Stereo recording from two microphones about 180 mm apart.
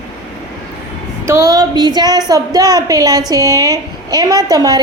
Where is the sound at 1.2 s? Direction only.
15° right (ahead or behind).